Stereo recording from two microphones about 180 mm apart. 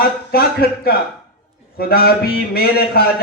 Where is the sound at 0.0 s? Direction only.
55° left (ahead or behind).